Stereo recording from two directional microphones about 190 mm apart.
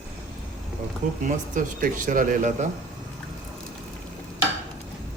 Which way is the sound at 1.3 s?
45° right (ahead or behind).